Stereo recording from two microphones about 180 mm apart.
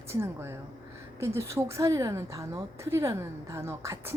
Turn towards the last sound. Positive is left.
turn(degrees=-15)  # may be behind; listen again after turning